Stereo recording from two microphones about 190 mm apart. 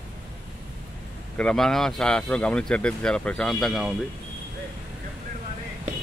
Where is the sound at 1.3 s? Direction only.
5° left (ahead or behind).